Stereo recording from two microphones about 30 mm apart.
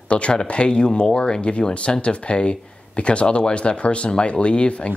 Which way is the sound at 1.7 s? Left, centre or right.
Left.